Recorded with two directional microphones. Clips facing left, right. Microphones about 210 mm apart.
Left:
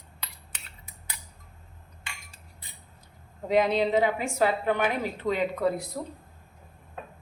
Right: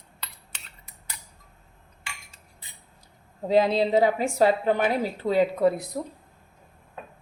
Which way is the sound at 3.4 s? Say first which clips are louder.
Right 2 dB; 30° right (ahead or behind).